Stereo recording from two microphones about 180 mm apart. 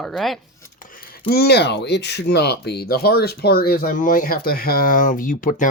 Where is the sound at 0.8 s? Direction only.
50° left (ahead or behind).